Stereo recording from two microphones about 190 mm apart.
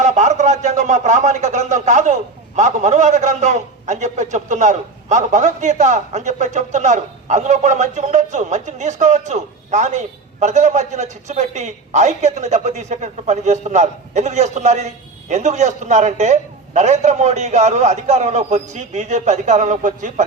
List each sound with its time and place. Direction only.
0.0 s speech: 40° right (ahead or behind)